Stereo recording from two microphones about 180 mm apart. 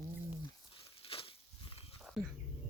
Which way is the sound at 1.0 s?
30° left (ahead or behind).